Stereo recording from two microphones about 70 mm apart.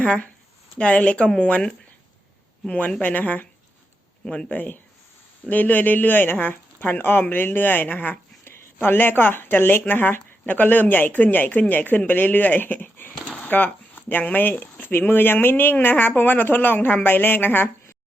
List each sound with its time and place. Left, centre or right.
0.0 s speech: centre